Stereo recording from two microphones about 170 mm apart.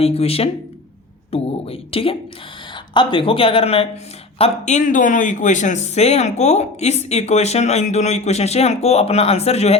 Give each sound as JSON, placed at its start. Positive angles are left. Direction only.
{"t": 0.0, "sound": "a man's voice", "side_deg": 35}